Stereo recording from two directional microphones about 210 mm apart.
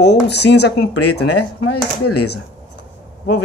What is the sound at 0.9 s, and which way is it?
Speech, 90° left.